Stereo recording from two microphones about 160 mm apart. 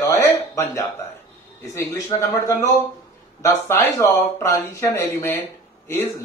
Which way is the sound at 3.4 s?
20° left (ahead or behind).